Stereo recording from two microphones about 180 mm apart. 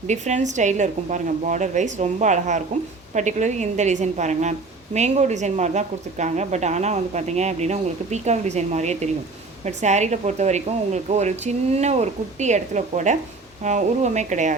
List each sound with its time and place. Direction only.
0.1 s speech: 40° right (ahead or behind)